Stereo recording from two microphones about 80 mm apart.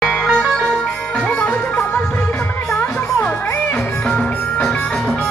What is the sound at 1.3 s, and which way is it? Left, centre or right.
Music, left.